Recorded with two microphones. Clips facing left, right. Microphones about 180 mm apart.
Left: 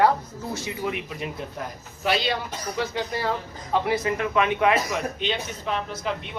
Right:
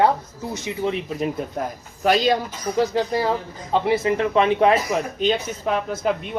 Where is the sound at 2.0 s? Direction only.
45° right (ahead or behind).